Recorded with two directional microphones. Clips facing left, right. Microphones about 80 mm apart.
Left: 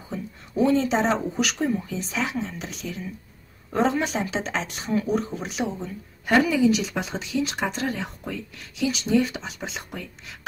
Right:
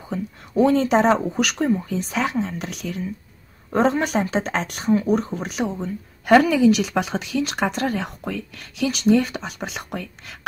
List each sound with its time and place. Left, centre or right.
0.1 s speech: right
3.7 s speech: right
4.8 s speech: right
6.2 s speech: right